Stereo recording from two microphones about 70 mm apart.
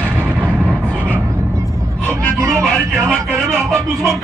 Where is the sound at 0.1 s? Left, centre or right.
Right.